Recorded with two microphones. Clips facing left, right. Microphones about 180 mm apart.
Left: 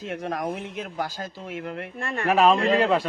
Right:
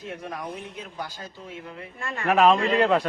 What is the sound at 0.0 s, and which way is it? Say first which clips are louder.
Speech: left 5 dB; 90° left.